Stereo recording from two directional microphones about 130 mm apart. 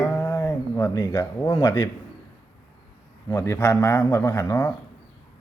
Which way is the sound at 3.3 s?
20° left (ahead or behind).